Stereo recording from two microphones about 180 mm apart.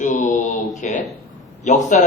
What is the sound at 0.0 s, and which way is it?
Mantra, 45° left (ahead or behind).